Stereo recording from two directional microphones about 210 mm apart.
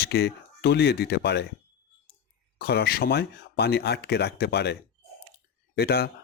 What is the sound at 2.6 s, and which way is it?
Speech, 50° left (ahead or behind).